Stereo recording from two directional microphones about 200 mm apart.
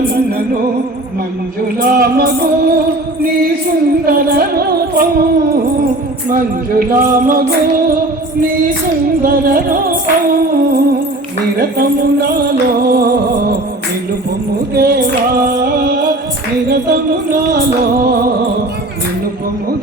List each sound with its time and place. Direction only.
1.6 s music: 50° right (ahead or behind)
4.0 s music: 50° right (ahead or behind)
6.3 s music: 45° right (ahead or behind)
9.2 s music: 45° right (ahead or behind)
14.8 s music: 50° right (ahead or behind)